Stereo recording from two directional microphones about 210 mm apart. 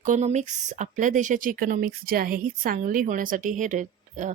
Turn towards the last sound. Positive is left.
turn(degrees=-35)  # may be behind; listen again after turning